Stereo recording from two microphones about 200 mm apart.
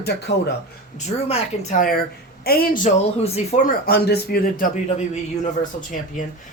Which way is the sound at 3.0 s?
35° left (ahead or behind).